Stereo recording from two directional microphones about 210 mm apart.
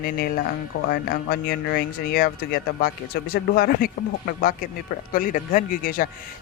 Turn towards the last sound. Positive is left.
turn(degrees=40)  # may be behind; listen again after turning